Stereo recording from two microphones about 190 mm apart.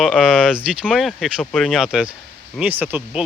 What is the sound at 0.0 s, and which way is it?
Speech, centre (ahead or behind).